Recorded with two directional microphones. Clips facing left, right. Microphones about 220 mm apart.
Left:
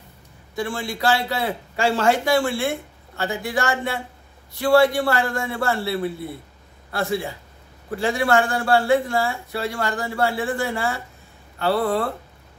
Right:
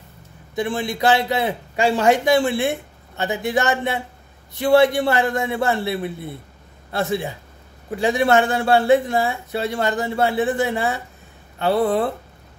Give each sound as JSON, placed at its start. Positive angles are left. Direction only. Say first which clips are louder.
{"t": 0.6, "sound": "speech", "louder": "right 4 dB", "side_deg": -20}